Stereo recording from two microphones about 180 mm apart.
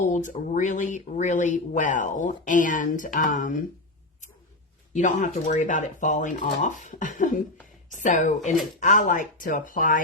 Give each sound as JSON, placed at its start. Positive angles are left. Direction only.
{"t": 0.0, "sound": "speech", "side_deg": 45}
{"t": 4.9, "sound": "speech", "side_deg": 45}